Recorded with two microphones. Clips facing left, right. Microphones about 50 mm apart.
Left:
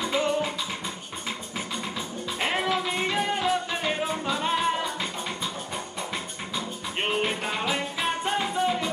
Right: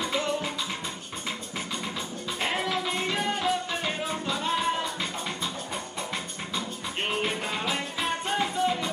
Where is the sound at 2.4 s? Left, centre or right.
Centre.